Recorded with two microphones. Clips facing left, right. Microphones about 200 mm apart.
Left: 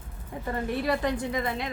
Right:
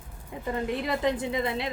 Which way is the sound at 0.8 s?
20° right (ahead or behind).